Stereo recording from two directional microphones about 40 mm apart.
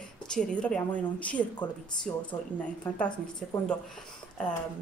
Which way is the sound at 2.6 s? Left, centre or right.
Left.